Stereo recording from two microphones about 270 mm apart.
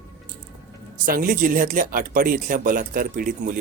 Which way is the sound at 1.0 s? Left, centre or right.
Right.